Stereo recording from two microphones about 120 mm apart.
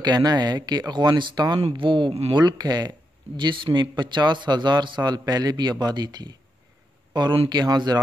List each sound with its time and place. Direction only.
0.0 s a man's voice: 35° right (ahead or behind); by 2.3 s 50° right (ahead or behind)
2.3 s a man's voice: 35° right (ahead or behind)